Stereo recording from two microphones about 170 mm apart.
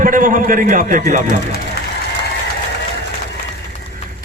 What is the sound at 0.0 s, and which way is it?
A man's voice, 50° right (ahead or behind).